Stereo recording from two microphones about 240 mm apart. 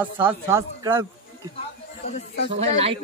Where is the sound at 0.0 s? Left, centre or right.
Centre.